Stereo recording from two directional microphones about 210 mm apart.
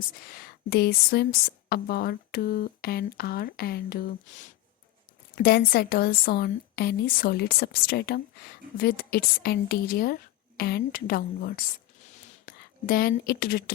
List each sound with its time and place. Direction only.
0.0 s a woman's voice: 45° left (ahead or behind)
5.3 s a woman's voice: 45° left (ahead or behind)